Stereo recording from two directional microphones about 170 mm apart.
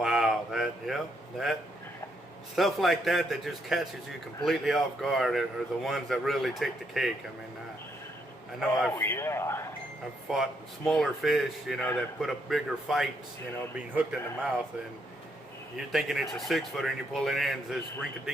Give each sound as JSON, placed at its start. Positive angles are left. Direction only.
{"t": 0.0, "sound": "a sound", "side_deg": -5}
{"t": 2.6, "sound": "a man's voice", "side_deg": 0}
{"t": 9.0, "sound": "a man's voice", "side_deg": 15}
{"t": 10.2, "sound": "a man's voice", "side_deg": 0}
{"t": 15.9, "sound": "a man's voice", "side_deg": 0}